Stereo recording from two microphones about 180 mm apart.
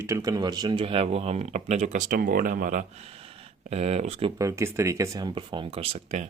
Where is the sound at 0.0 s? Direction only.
20° right (ahead or behind); by 2.8 s 50° right (ahead or behind).